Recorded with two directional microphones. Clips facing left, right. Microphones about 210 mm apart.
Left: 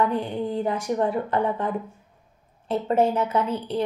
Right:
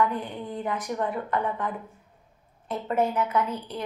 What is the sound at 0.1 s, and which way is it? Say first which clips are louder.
A woman's voice: left 6 dB; 30° left (ahead or behind).